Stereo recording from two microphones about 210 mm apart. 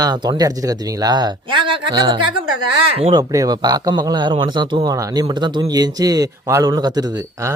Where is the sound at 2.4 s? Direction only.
90° right.